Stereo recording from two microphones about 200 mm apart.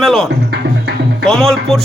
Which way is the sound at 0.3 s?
55° right (ahead or behind).